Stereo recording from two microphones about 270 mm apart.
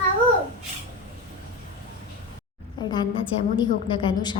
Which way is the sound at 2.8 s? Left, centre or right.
Centre.